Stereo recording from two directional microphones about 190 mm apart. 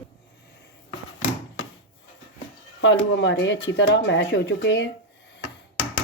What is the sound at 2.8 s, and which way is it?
Speech, 75° left (ahead or behind).